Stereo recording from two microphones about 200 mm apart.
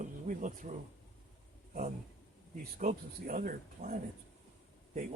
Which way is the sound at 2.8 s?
40° right (ahead or behind).